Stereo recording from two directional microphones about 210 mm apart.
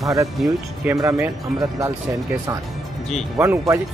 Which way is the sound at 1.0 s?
15° right (ahead or behind).